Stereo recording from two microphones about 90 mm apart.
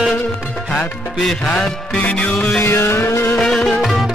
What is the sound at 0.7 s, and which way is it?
Music, 5° left (ahead or behind).